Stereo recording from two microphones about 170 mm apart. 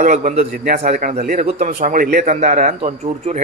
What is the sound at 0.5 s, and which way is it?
Speech, 65° right (ahead or behind).